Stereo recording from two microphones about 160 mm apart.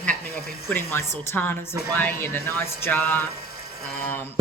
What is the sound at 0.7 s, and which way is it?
A woman's voice, 15° left (ahead or behind).